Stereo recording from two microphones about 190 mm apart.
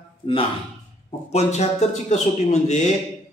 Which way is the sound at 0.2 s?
25° left (ahead or behind).